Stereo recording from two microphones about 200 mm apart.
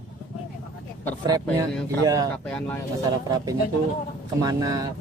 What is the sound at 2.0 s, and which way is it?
Speech, 20° right (ahead or behind).